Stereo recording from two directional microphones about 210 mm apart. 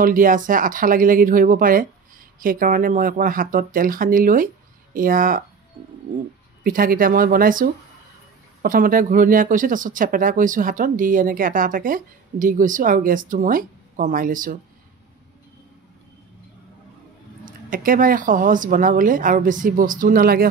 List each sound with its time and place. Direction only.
0.0 s speech: 40° right (ahead or behind)
6.6 s speech: 40° right (ahead or behind)
17.5 s speech: 40° right (ahead or behind)